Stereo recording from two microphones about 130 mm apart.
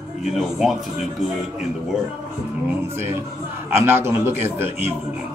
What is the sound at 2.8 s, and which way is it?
A man's voice, 20° right (ahead or behind).